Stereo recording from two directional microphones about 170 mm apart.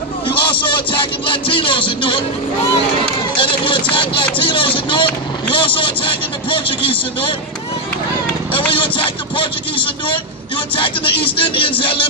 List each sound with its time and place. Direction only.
0.3 s vehicle: 30° left (ahead or behind)
3.3 s run: 30° left (ahead or behind)
3.9 s vehicle: 30° left (ahead or behind)
8.5 s vehicle: 30° left (ahead or behind)
10.8 s speech: 30° left (ahead or behind)